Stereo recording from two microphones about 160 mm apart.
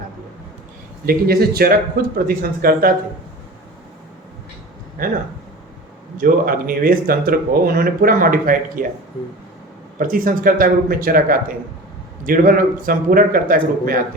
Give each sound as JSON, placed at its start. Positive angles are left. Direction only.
{"t": 1.0, "sound": "speech", "side_deg": -70}
{"t": 5.0, "sound": "speech", "side_deg": -60}
{"t": 6.1, "sound": "speech", "side_deg": -60}
{"t": 10.0, "sound": "speech", "side_deg": -60}